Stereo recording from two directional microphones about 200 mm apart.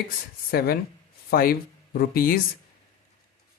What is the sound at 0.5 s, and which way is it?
A man's voice, 50° left (ahead or behind).